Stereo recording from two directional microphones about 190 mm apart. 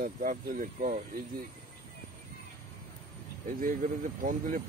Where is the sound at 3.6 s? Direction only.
45° right (ahead or behind).